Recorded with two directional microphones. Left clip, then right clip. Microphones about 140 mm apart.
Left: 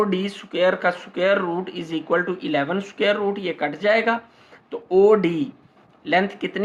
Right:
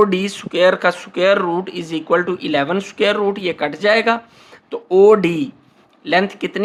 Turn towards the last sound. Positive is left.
turn(degrees=-40)  # may be behind; listen again after turning